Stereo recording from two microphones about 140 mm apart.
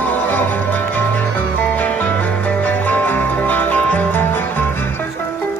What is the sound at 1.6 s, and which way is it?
Music, 10° left (ahead or behind).